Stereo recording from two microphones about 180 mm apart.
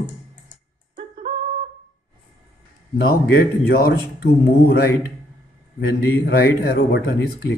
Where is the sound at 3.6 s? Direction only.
55° left (ahead or behind).